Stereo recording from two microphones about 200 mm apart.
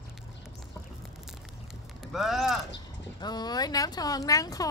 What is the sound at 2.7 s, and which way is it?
Speech, 20° left (ahead or behind).